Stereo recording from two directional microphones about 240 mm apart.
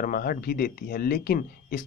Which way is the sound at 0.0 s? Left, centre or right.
Left.